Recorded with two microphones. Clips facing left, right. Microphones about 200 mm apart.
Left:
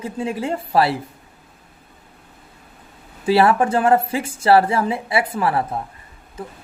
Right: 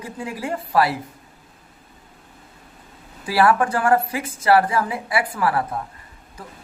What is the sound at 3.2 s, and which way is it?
Speech, 25° left (ahead or behind).